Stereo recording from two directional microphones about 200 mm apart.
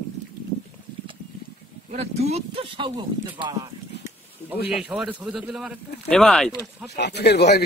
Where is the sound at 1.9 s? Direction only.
35° right (ahead or behind).